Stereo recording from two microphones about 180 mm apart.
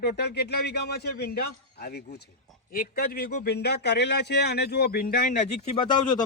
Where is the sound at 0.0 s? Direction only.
65° left (ahead or behind).